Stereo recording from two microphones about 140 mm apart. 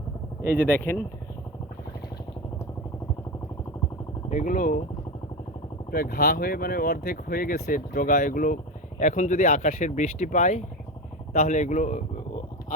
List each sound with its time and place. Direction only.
0.5 s speech: 15° left (ahead or behind)
4.3 s speech: 65° left (ahead or behind)
5.9 s speech: 90° left; by 8.5 s 75° left (ahead or behind)
9.0 s speech: 60° left (ahead or behind)